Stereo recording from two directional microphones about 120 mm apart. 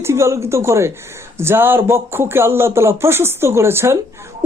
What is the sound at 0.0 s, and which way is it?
Speech, 25° right (ahead or behind).